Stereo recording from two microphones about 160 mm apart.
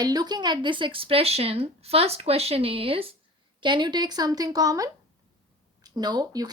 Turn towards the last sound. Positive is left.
turn(degrees=-25)  # may be behind; listen again after turning